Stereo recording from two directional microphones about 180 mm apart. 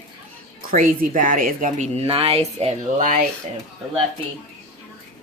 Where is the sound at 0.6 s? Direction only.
50° right (ahead or behind).